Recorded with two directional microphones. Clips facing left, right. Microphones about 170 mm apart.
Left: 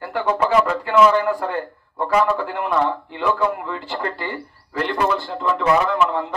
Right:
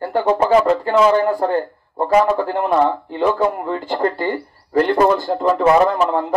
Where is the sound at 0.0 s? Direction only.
35° right (ahead or behind).